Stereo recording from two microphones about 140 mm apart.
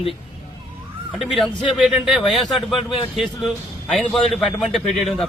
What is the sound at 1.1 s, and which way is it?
A man's voice, centre (ahead or behind).